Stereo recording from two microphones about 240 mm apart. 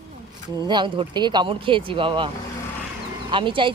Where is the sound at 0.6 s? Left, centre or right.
Centre.